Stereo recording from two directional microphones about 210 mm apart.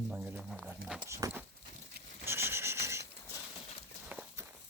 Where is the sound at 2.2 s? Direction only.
10° right (ahead or behind).